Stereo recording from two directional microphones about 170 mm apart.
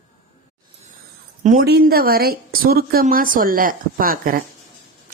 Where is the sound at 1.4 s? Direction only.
50° right (ahead or behind).